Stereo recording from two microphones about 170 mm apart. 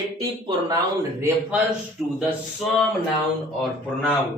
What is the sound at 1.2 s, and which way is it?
Speech, 10° right (ahead or behind).